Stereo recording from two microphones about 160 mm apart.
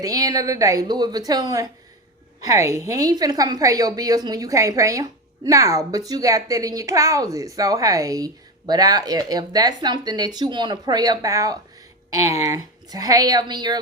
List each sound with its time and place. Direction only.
0.0 s a woman's voice: 25° right (ahead or behind)